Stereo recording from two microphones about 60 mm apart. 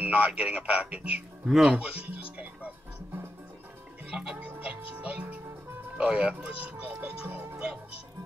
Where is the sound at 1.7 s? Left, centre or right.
Right.